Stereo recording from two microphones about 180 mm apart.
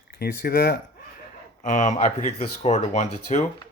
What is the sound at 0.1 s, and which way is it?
Speech, 60° left (ahead or behind).